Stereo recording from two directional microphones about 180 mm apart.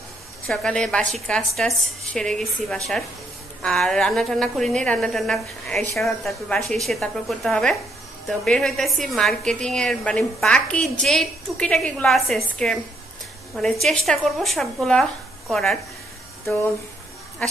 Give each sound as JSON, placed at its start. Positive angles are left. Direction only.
{"t": 0.5, "sound": "a woman's voice", "side_deg": 5}